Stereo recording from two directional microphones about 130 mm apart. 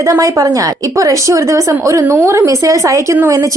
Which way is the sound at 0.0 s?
25° right (ahead or behind).